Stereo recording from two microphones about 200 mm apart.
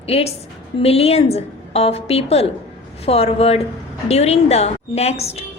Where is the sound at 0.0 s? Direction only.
30° left (ahead or behind).